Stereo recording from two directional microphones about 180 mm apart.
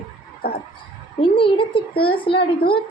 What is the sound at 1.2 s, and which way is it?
Speech, 30° left (ahead or behind).